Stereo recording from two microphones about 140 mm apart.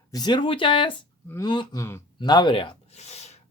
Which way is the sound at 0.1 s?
30° left (ahead or behind).